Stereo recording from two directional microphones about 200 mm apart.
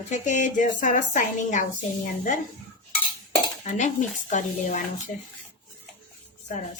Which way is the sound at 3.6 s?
35° left (ahead or behind).